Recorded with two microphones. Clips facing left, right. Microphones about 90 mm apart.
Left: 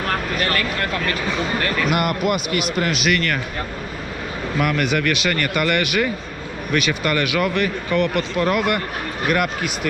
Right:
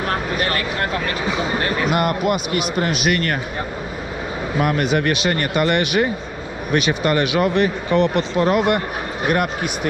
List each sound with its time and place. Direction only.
0.0 s a sound: 15° right (ahead or behind)
2.0 s speech: 35° right (ahead or behind)
4.6 s speech: 35° right (ahead or behind)